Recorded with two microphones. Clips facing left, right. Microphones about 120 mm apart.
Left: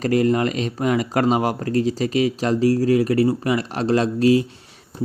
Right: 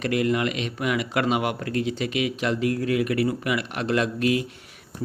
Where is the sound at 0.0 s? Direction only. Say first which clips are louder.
Left 5 dB; 35° left (ahead or behind).